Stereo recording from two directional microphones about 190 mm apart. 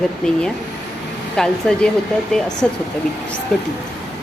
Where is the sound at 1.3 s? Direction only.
5° left (ahead or behind).